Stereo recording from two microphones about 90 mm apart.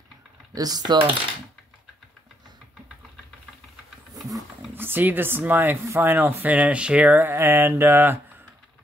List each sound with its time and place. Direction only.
0.6 s coin: 45° right (ahead or behind)
4.7 s speech: 20° right (ahead or behind)